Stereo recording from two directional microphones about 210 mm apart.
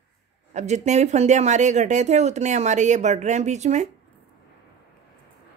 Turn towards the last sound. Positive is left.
turn(degrees=-35)  # may be behind; listen again after turning